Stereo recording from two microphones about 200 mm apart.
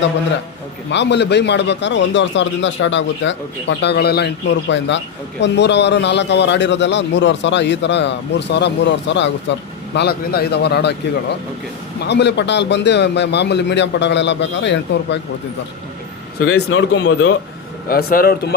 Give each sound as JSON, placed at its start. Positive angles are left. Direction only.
{"t": 0.9, "sound": "a man's voice", "side_deg": 60}
{"t": 16.6, "sound": "a man's voice", "side_deg": 60}
{"t": 17.8, "sound": "speech", "side_deg": 45}